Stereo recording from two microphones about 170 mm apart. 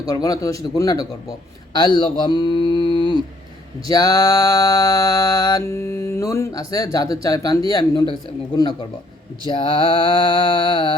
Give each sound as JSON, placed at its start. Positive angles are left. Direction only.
{"t": 0.0, "sound": "mantra", "side_deg": 20}
{"t": 9.5, "sound": "mantra", "side_deg": 30}